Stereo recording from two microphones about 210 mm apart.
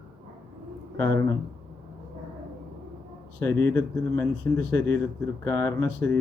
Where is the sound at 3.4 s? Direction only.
10° left (ahead or behind).